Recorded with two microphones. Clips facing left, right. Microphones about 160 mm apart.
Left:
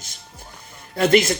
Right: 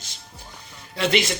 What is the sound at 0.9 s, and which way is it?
Speech, 45° left (ahead or behind).